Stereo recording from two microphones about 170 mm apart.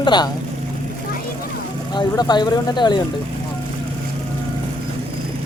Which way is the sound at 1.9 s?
25° left (ahead or behind).